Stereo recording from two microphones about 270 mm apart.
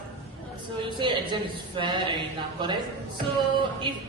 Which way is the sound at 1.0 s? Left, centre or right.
Centre.